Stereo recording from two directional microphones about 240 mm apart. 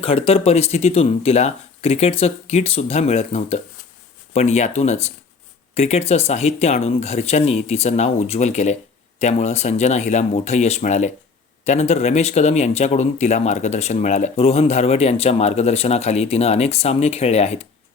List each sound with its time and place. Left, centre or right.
0.0 s speech: left